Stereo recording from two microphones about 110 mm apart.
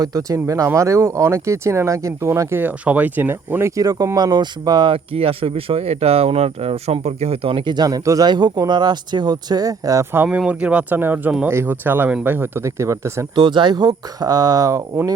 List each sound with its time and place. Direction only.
0.0 s speech: 30° right (ahead or behind)
3.8 s speech: 35° right (ahead or behind)
5.1 s speech: 60° right (ahead or behind); by 10.2 s 25° right (ahead or behind)
10.2 s speech: 10° right (ahead or behind); by 13.2 s 25° right (ahead or behind)
13.3 s speech: 45° right (ahead or behind)